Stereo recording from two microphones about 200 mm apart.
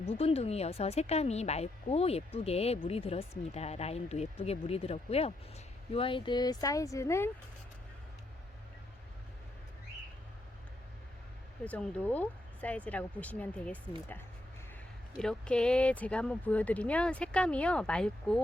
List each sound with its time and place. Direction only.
0.1 s speech: 30° left (ahead or behind)
11.6 s speech: 5° left (ahead or behind)
15.2 s speech: 5° left (ahead or behind)